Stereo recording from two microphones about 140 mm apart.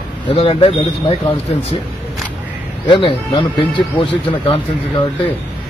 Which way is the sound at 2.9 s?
40° left (ahead or behind).